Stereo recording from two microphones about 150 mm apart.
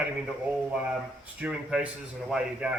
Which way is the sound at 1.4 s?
5° right (ahead or behind).